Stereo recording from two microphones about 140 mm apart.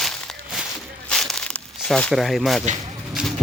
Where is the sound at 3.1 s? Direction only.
Centre (ahead or behind).